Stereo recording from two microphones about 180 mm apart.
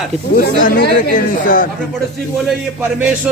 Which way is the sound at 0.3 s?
50° left (ahead or behind).